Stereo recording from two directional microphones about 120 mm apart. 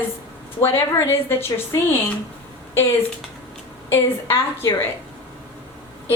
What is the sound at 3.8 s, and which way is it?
Speech, 20° left (ahead or behind).